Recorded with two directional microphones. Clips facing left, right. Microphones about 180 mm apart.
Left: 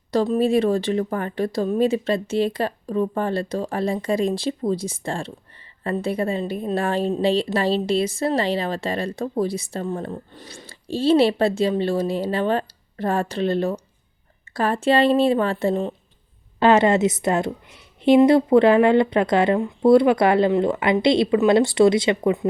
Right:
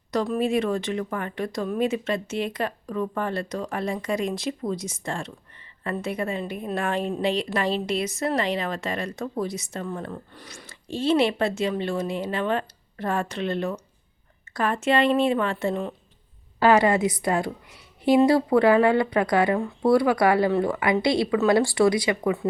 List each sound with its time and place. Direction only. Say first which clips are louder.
0.1 s a woman's voice: left 5 dB; 30° left (ahead or behind)